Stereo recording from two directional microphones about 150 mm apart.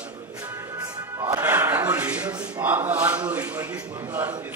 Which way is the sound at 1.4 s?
15° right (ahead or behind).